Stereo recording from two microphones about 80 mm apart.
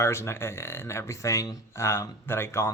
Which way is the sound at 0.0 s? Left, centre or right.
Left.